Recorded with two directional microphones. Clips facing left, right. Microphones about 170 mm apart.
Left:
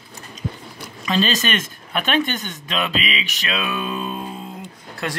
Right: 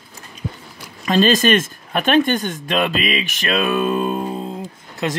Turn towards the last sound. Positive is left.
turn(degrees=-25)  # may be behind; listen again after turning